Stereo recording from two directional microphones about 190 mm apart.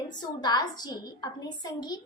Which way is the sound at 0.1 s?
20° left (ahead or behind).